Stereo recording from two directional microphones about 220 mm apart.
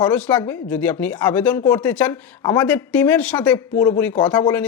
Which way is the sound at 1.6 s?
20° left (ahead or behind).